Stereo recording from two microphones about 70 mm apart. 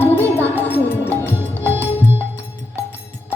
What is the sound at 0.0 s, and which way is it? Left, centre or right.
Music, left.